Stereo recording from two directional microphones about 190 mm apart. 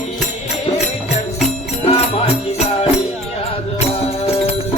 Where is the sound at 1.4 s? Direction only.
30° left (ahead or behind).